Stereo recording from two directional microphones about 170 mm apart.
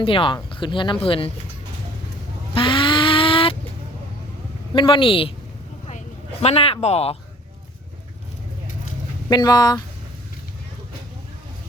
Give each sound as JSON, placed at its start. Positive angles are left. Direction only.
{"t": 0.0, "sound": "speech", "side_deg": 30}
{"t": 2.6, "sound": "a sound", "side_deg": 30}
{"t": 4.7, "sound": "speech", "side_deg": 30}
{"t": 6.4, "sound": "speech", "side_deg": 35}
{"t": 9.3, "sound": "speech", "side_deg": 25}